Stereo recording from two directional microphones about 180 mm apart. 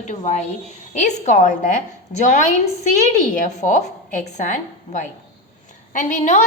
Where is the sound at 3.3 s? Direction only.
45° left (ahead or behind).